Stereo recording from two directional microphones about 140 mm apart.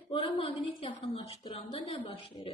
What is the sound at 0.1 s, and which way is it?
A woman's voice, 40° left (ahead or behind).